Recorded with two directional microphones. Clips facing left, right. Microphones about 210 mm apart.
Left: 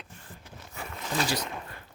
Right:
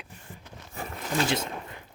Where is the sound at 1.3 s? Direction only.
20° right (ahead or behind).